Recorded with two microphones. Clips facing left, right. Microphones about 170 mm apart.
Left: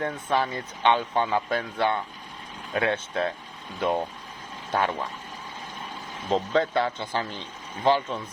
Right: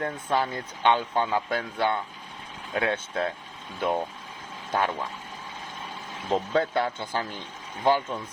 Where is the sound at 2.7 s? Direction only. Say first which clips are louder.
Left 1 dB; centre (ahead or behind).